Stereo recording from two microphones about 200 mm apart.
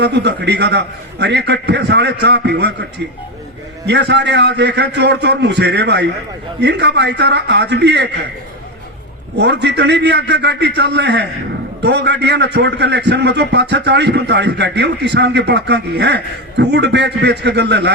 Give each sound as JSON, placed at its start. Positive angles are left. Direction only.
{"t": 0.0, "sound": "a man's voice", "side_deg": -60}
{"t": 3.8, "sound": "a man's voice", "side_deg": -55}
{"t": 9.4, "sound": "a man's voice", "side_deg": -60}